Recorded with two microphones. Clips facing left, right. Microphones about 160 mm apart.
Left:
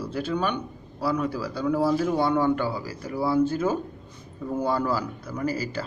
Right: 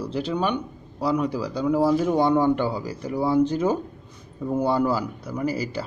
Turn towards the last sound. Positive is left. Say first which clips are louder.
# right 2 dB
turn(degrees=-10)  # may be behind; listen again after turning